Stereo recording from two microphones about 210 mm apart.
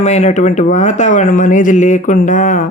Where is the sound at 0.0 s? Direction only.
35° left (ahead or behind).